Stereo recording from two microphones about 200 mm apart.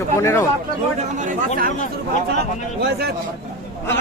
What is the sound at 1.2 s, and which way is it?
Speech, 40° right (ahead or behind).